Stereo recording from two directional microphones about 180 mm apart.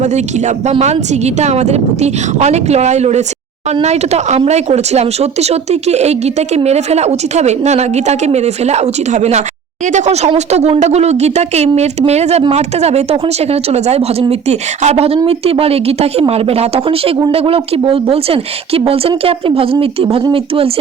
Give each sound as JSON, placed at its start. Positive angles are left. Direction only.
{"t": 0.0, "sound": "speech", "side_deg": -40}